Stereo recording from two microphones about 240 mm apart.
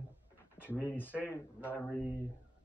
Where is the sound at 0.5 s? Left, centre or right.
Centre.